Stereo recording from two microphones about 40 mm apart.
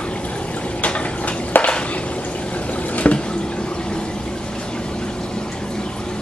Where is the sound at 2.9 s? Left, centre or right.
Left.